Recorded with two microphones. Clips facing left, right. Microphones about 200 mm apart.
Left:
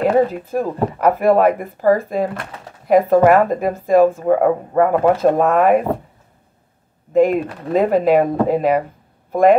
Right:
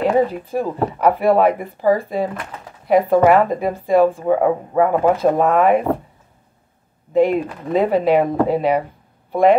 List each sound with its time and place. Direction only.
0.0 s speech: 45° left (ahead or behind)
7.2 s speech: 45° left (ahead or behind)